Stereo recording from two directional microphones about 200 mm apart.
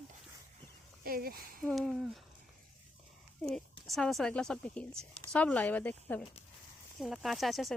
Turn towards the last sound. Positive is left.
turn(degrees=0)  # may be behind; listen again after turning